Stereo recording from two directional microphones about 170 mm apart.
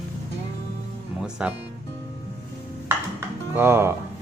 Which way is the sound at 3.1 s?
15° right (ahead or behind).